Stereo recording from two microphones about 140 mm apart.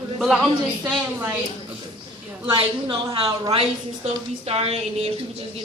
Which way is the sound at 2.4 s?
40° right (ahead or behind).